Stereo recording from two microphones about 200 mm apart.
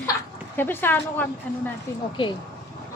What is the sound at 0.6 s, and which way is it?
Speech, 10° left (ahead or behind).